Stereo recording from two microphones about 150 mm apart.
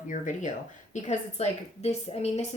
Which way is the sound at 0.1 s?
60° left (ahead or behind).